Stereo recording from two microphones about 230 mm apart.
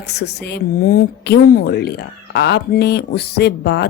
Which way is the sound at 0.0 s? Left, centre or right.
Left.